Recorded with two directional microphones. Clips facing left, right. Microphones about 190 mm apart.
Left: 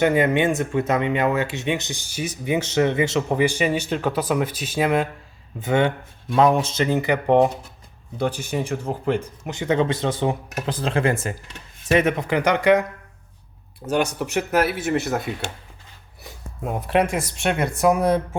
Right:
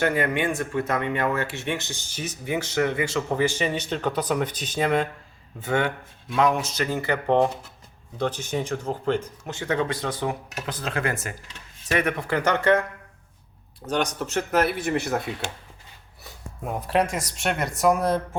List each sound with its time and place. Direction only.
0.0 s speech: 20° left (ahead or behind)
5.5 s speech: 20° left (ahead or behind)
6.3 s speech: 35° left (ahead or behind); by 12.8 s 15° left (ahead or behind)
13.8 s speech: 10° left (ahead or behind)
16.6 s speech: centre (ahead or behind)